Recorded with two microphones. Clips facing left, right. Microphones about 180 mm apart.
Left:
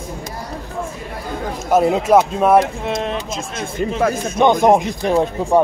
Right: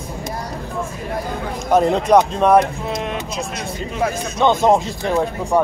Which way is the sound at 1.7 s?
5° left (ahead or behind).